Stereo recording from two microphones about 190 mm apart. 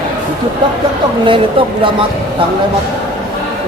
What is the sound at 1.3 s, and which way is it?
Speech, 25° right (ahead or behind).